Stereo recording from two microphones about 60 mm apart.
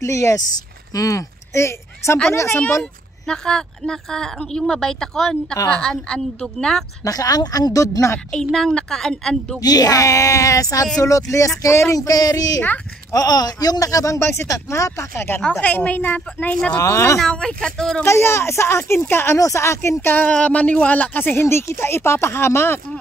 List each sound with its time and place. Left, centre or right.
0.0 s speech: left
2.8 s a woman's voice: centre
7.1 s speech: left
8.5 s a woman's voice: centre
9.6 s speech: left
11.0 s speech: left
11.9 s speech: left
14.2 s speech: left
15.6 s a woman's voice: left
16.8 s speech: left
17.3 s a woman's voice: centre
18.0 s speech: left
19.3 s speech: left
20.2 s speech: centre; by 22.8 s left